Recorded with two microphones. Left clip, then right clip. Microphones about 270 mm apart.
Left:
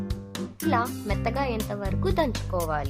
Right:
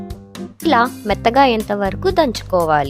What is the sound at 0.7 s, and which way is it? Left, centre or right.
Speech, right.